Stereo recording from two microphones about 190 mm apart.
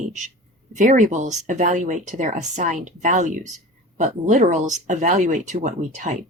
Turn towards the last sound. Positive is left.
turn(degrees=-40)  # may be behind; listen again after turning